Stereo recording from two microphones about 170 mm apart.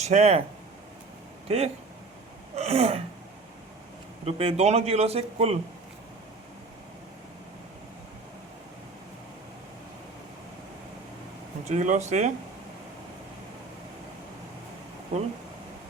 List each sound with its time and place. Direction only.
0.0 s a man's voice: 40° right (ahead or behind)
1.5 s a man's voice: 35° right (ahead or behind)
4.3 s a man's voice: 35° right (ahead or behind)
11.7 s speech: 45° right (ahead or behind)